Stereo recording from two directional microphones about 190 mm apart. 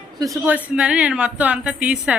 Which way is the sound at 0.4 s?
5° right (ahead or behind).